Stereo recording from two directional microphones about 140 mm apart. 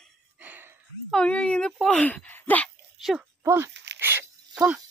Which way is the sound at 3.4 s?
20° right (ahead or behind).